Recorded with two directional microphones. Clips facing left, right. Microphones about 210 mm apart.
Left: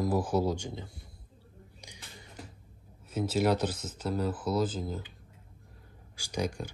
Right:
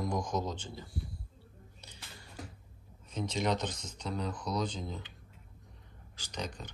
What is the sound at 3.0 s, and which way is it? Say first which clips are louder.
Speech: left 5 dB; 5° left (ahead or behind).